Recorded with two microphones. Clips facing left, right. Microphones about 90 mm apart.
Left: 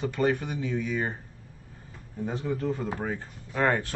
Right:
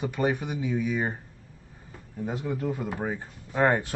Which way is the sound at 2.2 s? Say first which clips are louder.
Even; 10° right (ahead or behind).